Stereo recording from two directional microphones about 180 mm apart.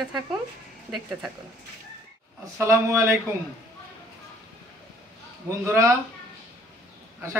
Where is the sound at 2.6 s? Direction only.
15° right (ahead or behind).